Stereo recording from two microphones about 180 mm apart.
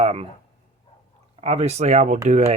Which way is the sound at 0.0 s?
35° right (ahead or behind).